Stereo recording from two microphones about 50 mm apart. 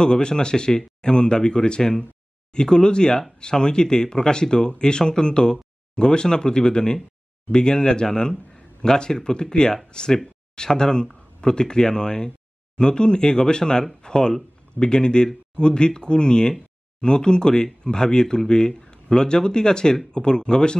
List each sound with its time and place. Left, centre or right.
0.0 s speech: centre